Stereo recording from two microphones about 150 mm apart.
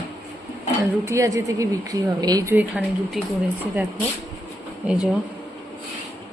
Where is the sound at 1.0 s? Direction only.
20° right (ahead or behind).